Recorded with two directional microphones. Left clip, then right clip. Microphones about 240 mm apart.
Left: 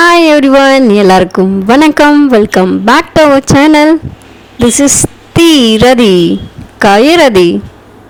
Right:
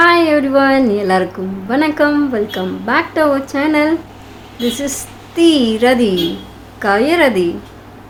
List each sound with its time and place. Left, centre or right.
0.0 s speech: left